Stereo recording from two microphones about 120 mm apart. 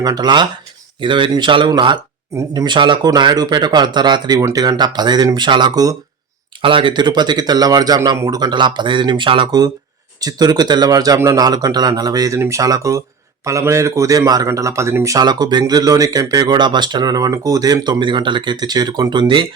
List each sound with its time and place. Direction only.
0.0 s speech: 35° right (ahead or behind)
6.6 s speech: 45° right (ahead or behind)